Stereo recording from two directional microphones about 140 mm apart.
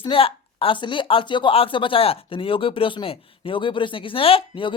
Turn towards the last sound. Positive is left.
turn(degrees=40)  # may be behind; listen again after turning